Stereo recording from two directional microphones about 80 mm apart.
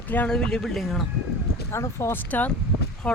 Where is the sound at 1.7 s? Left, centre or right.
Left.